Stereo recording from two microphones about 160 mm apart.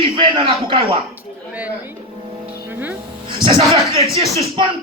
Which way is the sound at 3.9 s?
40° right (ahead or behind).